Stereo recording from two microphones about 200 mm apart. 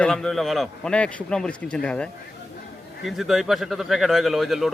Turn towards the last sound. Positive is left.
turn(degrees=0)  # may be behind; listen again after turning